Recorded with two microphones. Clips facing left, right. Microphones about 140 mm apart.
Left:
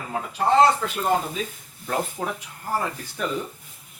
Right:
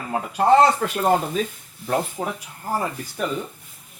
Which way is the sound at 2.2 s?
15° right (ahead or behind).